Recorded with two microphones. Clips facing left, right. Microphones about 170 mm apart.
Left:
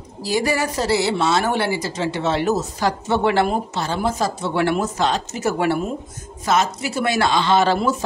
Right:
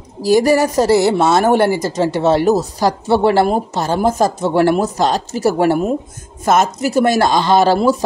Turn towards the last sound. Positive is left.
turn(degrees=-35)  # may be behind; listen again after turning